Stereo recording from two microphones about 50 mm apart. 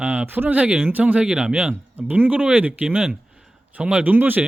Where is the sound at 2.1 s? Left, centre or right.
Right.